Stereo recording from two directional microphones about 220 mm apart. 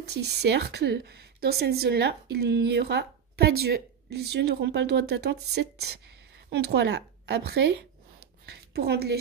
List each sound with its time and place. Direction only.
0.1 s a woman's voice: 50° right (ahead or behind)